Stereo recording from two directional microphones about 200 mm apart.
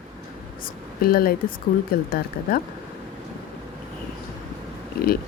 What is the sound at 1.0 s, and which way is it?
Speech, 50° left (ahead or behind).